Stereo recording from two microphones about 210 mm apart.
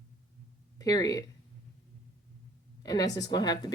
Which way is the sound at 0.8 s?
15° left (ahead or behind).